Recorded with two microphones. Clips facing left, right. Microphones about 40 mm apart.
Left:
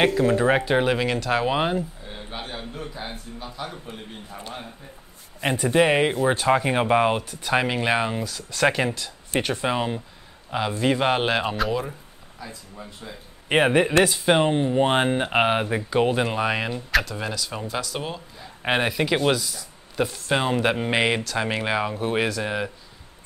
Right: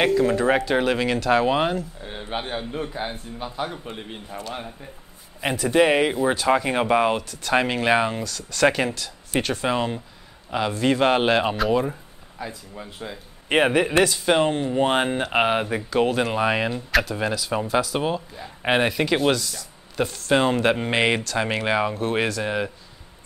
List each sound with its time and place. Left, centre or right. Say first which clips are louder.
0.0 s speech: even; centre
2.0 s a man's voice: right 5 dB; right
5.7 s speech: right 1 dB; centre
7.5 s speech: right 2 dB; centre
8.2 s speech: right 2 dB; centre
12.4 s speech: right 4 dB; right
13.5 s speech: even; centre